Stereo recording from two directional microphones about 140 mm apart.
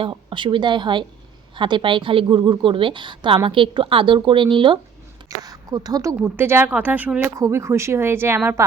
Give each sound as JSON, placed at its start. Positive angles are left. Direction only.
{"t": 0.0, "sound": "a woman's voice", "side_deg": -35}
{"t": 7.3, "sound": "speech", "side_deg": -20}